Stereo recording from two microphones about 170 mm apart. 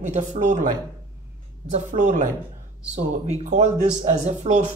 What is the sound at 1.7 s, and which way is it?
Speech, 50° right (ahead or behind).